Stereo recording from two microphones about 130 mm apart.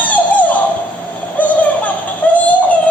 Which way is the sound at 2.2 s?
10° left (ahead or behind).